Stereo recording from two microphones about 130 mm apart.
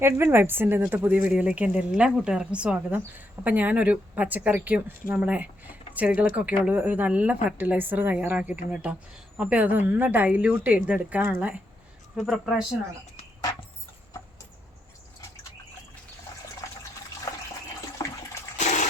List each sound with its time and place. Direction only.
0.0 s a woman's voice: 20° right (ahead or behind); by 12.6 s centre (ahead or behind)
18.0 s toilet flush: 25° left (ahead or behind)
18.6 s water: 65° left (ahead or behind)